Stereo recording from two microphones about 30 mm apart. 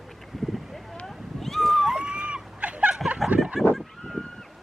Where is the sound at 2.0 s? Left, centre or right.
Right.